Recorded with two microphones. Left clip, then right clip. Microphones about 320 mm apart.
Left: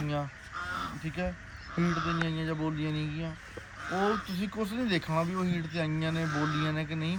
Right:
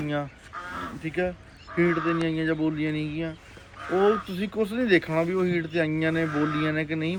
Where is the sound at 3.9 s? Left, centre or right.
Left.